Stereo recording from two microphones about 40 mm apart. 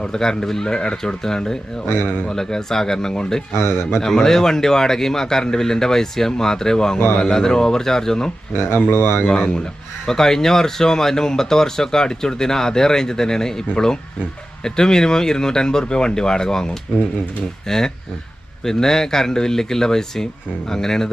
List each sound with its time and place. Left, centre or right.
0.0 s speech: centre
1.9 s speech: left
2.3 s speech: centre
8.5 s speech: left
10.1 s speech: centre